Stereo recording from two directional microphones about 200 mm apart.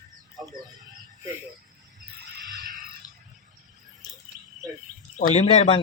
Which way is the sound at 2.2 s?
55° right (ahead or behind).